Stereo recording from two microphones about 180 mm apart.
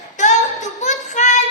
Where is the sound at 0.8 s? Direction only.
40° left (ahead or behind).